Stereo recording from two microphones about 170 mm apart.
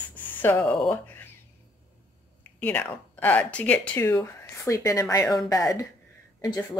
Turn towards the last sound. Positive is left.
turn(degrees=20)  # may be behind; listen again after turning